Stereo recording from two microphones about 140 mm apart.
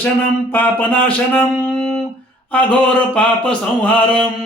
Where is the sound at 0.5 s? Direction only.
10° left (ahead or behind).